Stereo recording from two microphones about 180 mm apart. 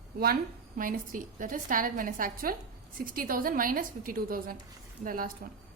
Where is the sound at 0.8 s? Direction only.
50° right (ahead or behind).